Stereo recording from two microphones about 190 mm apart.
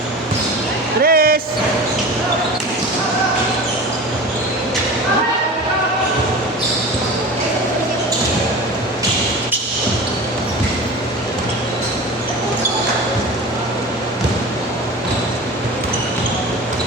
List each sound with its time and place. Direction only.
1.0 s speech: 50° right (ahead or behind)